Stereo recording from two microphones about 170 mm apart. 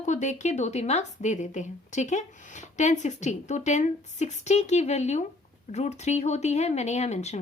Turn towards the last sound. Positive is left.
turn(degrees=40)  # may be behind; listen again after turning